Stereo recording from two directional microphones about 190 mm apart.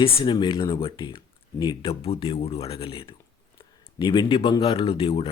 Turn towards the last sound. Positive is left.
turn(degrees=30)  # may be behind; listen again after turning